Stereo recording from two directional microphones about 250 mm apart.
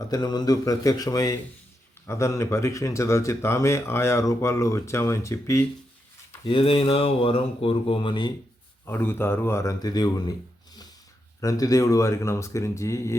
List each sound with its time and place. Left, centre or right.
0.1 s speech: centre
11.3 s speech: centre